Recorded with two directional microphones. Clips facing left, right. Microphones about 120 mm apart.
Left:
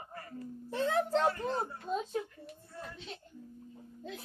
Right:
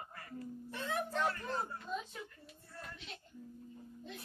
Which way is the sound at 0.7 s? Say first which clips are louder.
Left 9 dB; 90° left.